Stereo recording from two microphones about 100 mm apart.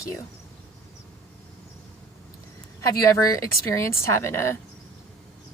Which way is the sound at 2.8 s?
35° left (ahead or behind).